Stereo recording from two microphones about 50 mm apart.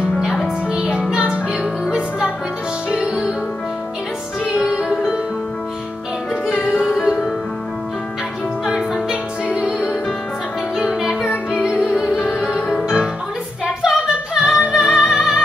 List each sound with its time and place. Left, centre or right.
1.5 s music: centre
4.6 s music: centre
9.1 s music: centre
10.8 s music: centre